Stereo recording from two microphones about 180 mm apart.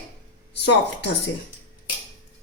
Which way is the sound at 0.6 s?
70° left (ahead or behind).